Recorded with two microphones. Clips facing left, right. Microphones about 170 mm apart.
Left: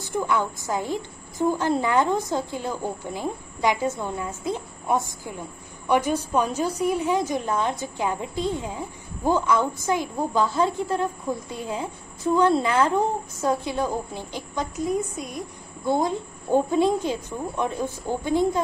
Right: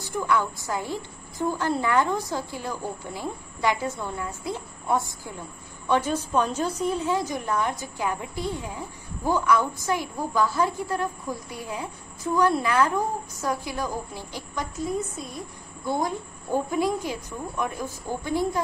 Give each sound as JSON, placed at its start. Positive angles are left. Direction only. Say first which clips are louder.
{"t": 0.0, "sound": "a woman's voice", "louder": "left 1 dB", "side_deg": 20}